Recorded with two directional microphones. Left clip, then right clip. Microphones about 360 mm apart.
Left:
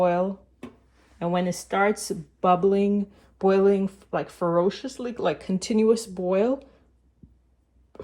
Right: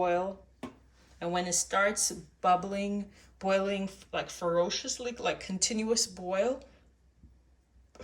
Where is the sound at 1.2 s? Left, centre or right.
Centre.